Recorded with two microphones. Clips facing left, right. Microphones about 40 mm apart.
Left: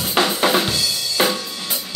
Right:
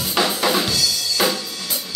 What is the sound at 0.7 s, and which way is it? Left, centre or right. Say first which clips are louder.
Drum: even; left.